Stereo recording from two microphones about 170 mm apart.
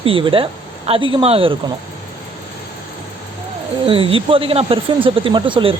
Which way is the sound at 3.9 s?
35° right (ahead or behind).